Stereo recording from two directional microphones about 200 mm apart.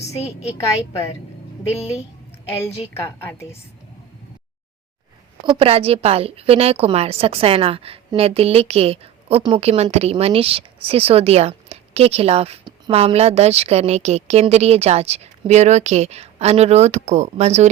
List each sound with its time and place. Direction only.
2.9 s a woman's voice: 10° left (ahead or behind)
5.4 s a woman's voice: 25° right (ahead or behind)